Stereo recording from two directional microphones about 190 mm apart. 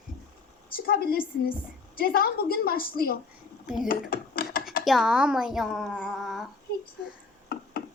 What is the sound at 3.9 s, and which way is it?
Rub, 50° left (ahead or behind).